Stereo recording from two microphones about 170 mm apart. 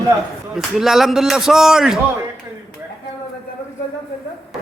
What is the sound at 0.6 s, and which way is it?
A man's voice, centre (ahead or behind).